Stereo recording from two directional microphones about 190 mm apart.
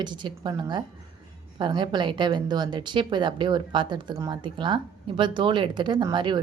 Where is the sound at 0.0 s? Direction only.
25° right (ahead or behind).